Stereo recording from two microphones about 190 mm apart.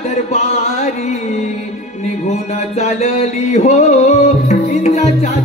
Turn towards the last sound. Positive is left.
turn(degrees=35)  # may be behind; listen again after turning